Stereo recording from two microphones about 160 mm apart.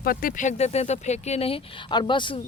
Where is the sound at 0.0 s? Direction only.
65° left (ahead or behind).